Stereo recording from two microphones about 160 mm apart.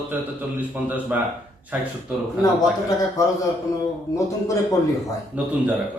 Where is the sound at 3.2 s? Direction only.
20° left (ahead or behind).